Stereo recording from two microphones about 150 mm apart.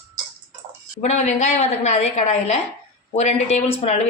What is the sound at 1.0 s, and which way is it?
Chopping, 50° left (ahead or behind).